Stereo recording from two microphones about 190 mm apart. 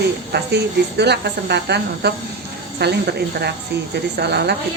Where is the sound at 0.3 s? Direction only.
60° right (ahead or behind).